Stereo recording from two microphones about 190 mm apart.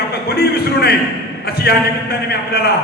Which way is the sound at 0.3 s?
55° left (ahead or behind).